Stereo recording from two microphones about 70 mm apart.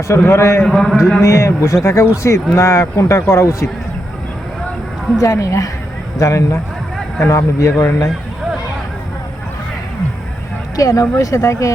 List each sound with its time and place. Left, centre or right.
0.3 s speech: left
0.6 s a man's voice: centre
1.2 s speech: left
5.1 s speech: left
10.8 s speech: left